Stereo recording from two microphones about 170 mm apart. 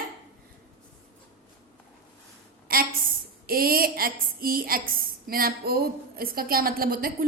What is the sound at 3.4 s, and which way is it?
A woman's voice, 60° right (ahead or behind).